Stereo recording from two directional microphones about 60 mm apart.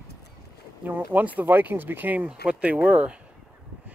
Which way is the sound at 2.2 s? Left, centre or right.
Centre.